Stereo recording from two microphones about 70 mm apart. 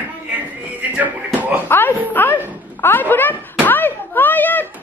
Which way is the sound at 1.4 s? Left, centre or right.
Right.